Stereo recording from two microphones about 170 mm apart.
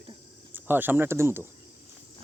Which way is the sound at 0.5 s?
10° right (ahead or behind).